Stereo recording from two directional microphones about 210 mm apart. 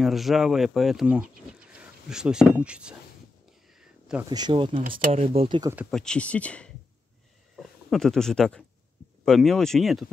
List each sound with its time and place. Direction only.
0.0 s speech: centre (ahead or behind)
3.8 s a sound: 5° right (ahead or behind)
4.3 s speech: 20° right (ahead or behind)
5.9 s speech: 5° left (ahead or behind)